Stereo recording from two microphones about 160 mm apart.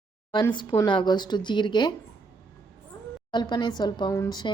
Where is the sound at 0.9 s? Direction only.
30° left (ahead or behind).